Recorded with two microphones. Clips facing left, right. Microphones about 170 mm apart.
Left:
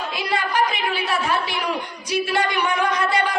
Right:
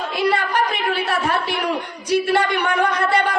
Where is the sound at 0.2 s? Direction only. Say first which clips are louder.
Right 7 dB; 60° right (ahead or behind).